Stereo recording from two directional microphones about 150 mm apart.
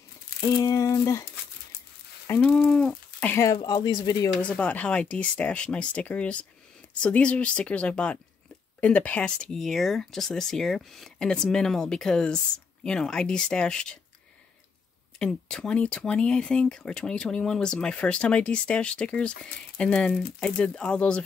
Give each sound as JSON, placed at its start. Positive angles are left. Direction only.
{"t": 0.4, "sound": "a sound", "side_deg": 20}
{"t": 2.2, "sound": "speech", "side_deg": 10}
{"t": 4.4, "sound": "speech", "side_deg": 10}
{"t": 15.1, "sound": "speech", "side_deg": 5}